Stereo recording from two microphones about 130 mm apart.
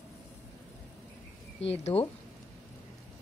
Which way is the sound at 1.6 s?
55° left (ahead or behind).